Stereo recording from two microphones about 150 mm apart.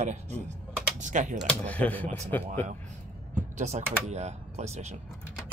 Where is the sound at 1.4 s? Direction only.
10° left (ahead or behind).